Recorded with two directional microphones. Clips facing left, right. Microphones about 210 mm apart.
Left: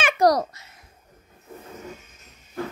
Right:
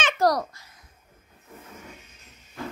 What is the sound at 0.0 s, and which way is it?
Babbling, 20° left (ahead or behind).